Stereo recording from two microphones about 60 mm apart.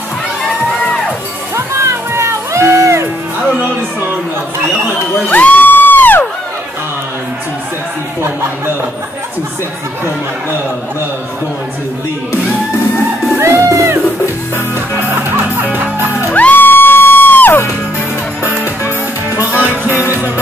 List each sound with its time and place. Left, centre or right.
1.5 s music: right
5.3 s music: left
13.4 s music: right
15.1 s music: right
16.3 s music: left
18.9 s music: right